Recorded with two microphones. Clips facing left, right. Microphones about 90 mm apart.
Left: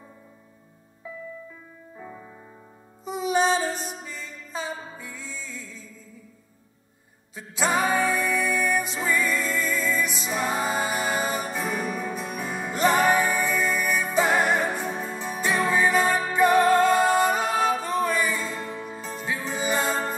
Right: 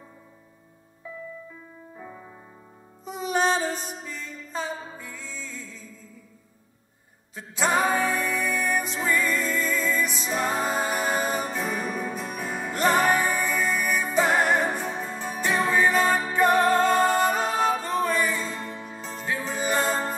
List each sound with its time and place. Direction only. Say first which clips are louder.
3.1 s music: left 2 dB; 15° left (ahead or behind)
7.3 s music: right 1 dB; 10° left (ahead or behind)
19.9 s music: even; 15° right (ahead or behind)